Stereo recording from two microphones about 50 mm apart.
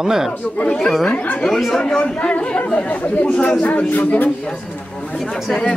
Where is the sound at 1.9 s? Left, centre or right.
Centre.